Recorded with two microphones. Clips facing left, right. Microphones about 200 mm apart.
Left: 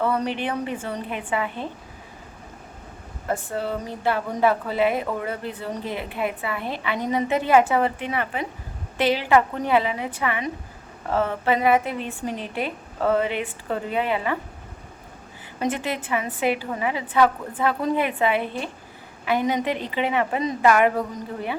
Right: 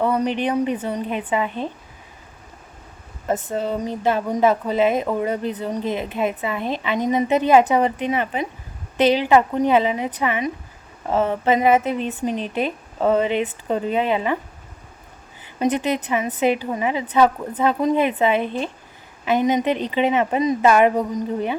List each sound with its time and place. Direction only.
0.0 s speech: 15° right (ahead or behind)
3.2 s speech: 20° right (ahead or behind)
15.5 s speech: 20° right (ahead or behind)